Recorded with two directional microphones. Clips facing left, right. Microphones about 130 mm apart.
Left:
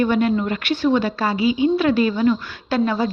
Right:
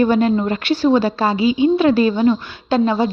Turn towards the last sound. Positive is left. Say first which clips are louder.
# right 4 dB
turn(degrees=-25)  # may be behind; listen again after turning